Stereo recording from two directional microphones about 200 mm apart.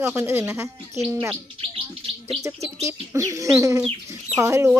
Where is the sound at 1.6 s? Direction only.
30° right (ahead or behind).